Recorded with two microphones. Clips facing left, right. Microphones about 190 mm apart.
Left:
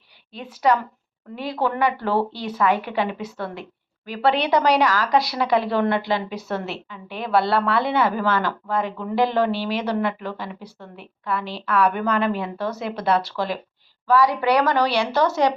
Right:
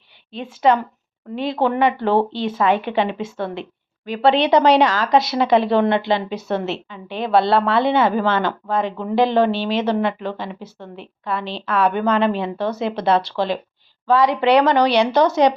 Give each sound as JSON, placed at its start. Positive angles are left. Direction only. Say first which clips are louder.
{"t": 0.3, "sound": "speech", "louder": "right 3 dB", "side_deg": -25}